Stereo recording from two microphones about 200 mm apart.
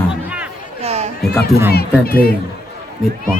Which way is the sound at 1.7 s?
50° left (ahead or behind).